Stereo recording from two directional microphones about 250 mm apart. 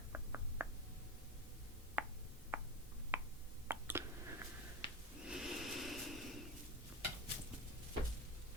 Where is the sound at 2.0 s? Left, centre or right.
Centre.